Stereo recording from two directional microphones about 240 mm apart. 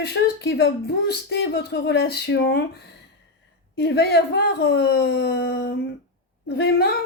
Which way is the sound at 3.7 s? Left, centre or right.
Left.